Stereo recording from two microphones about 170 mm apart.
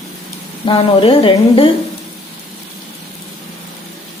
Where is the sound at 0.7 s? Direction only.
35° left (ahead or behind).